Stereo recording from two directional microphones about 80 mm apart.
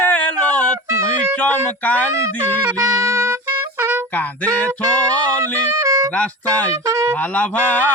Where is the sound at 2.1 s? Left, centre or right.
Right.